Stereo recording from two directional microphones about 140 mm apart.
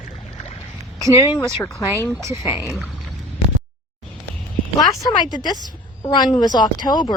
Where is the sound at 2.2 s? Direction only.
20° right (ahead or behind).